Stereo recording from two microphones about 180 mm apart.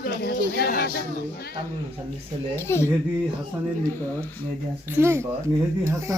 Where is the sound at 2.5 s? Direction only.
15° left (ahead or behind).